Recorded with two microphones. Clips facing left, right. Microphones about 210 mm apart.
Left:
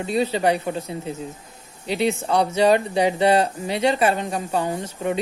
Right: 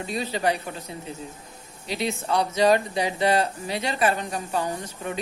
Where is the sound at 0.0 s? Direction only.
30° left (ahead or behind).